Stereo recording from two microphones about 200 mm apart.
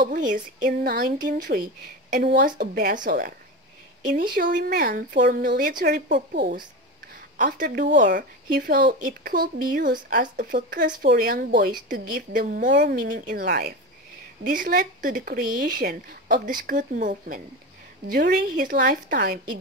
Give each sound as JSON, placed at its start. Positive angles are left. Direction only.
{"t": 0.0, "sound": "speech", "side_deg": -40}
{"t": 7.3, "sound": "speech", "side_deg": -40}